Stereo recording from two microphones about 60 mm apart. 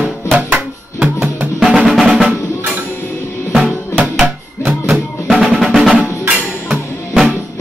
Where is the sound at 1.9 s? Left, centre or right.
Centre.